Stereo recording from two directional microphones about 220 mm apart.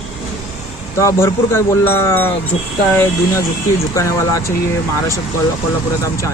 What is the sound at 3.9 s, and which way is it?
Speech, 15° left (ahead or behind).